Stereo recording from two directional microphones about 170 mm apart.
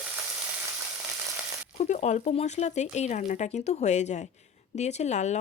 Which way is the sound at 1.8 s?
40° left (ahead or behind).